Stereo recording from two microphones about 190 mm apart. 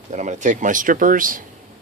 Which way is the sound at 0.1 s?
40° right (ahead or behind).